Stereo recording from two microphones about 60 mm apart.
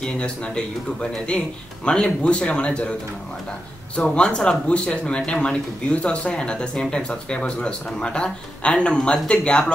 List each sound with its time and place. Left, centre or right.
0.0 s speech: centre
3.9 s speech: centre